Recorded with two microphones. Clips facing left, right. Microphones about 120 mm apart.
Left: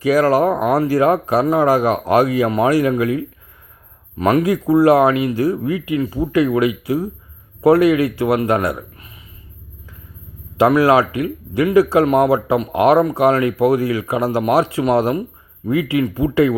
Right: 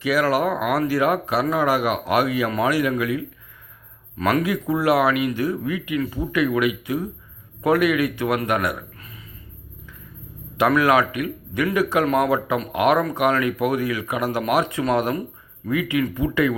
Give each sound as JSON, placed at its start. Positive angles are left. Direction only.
{"t": 0.0, "sound": "speech", "side_deg": 40}
{"t": 4.2, "sound": "speech", "side_deg": 20}
{"t": 4.4, "sound": "speech", "side_deg": 35}
{"t": 10.7, "sound": "speech", "side_deg": 30}